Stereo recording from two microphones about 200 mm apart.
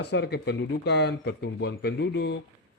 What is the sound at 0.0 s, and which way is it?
Speech, 55° left (ahead or behind).